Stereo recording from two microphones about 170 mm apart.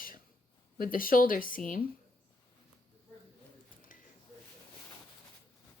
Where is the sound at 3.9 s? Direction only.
50° left (ahead or behind).